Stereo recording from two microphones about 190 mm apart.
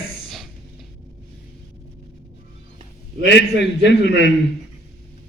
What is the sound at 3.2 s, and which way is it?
A man's voice, 65° left (ahead or behind).